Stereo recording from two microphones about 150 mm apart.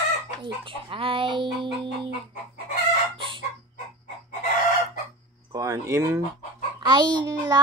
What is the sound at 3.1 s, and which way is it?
Chicken, 35° right (ahead or behind).